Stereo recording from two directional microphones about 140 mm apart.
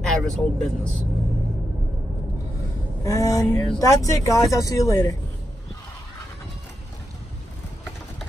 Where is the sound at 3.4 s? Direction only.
5° left (ahead or behind).